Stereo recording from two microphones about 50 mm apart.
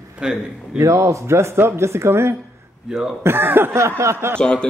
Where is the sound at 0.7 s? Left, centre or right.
Right.